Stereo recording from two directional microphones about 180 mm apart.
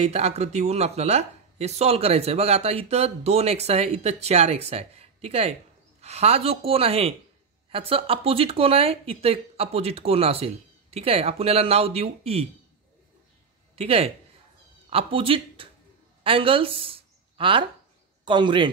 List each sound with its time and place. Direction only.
0.0 s speech: 35° right (ahead or behind)
13.7 s speech: 35° right (ahead or behind)